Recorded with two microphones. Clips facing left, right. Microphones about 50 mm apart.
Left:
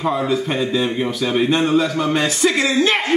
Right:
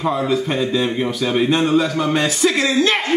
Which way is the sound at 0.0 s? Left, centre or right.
Centre.